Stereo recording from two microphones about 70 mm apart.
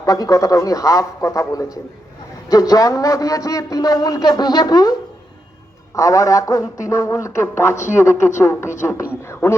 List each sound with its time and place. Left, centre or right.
0.0 s a man's voice: left
5.9 s a man's voice: left
9.2 s a sound: left